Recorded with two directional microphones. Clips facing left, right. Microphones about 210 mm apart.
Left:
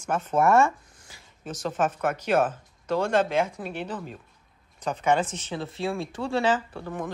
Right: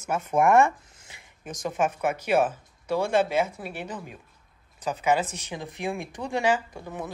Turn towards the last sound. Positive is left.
turn(degrees=-10)  # may be behind; listen again after turning